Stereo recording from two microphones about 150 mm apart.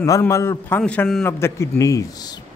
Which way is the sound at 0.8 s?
5° left (ahead or behind).